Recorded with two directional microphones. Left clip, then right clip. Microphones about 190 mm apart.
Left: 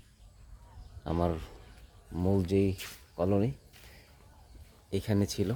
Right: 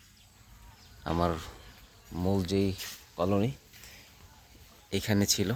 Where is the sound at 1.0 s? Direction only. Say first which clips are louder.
Right 2 dB; 5° left (ahead or behind).